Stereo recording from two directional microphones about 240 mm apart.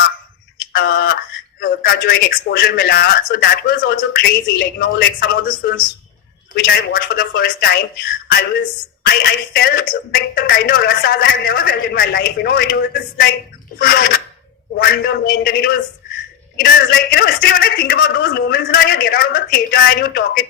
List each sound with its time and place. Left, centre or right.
0.7 s a sound: left
1.6 s speech: left
9.0 s speech: left